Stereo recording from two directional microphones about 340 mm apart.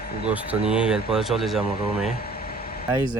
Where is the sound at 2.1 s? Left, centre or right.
Left.